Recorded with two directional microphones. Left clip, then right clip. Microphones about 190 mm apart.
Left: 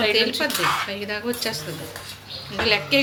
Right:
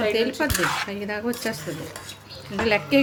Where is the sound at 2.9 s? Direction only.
40° right (ahead or behind).